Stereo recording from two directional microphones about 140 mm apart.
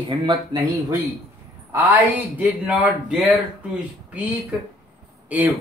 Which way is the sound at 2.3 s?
10° right (ahead or behind).